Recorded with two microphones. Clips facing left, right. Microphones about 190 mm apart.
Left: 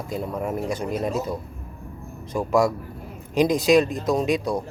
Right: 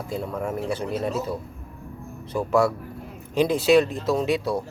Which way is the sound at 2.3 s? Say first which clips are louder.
Left 1 dB; 15° left (ahead or behind).